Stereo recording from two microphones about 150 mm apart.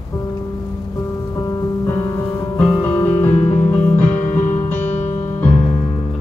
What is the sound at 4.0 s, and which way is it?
Music, 50° left (ahead or behind).